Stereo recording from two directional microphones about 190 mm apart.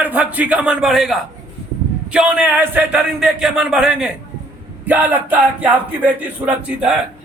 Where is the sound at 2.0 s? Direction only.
5° right (ahead or behind).